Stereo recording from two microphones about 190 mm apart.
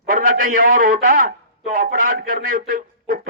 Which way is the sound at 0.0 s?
45° right (ahead or behind).